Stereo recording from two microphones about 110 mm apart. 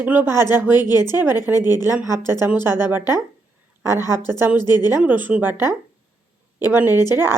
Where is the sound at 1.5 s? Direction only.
35° left (ahead or behind).